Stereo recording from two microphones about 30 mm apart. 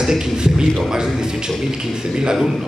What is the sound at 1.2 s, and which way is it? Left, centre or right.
A man's voice, right.